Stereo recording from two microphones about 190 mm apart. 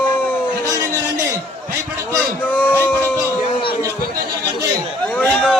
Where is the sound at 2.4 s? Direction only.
10° left (ahead or behind).